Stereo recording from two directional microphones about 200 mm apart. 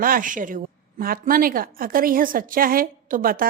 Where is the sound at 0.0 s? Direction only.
45° right (ahead or behind).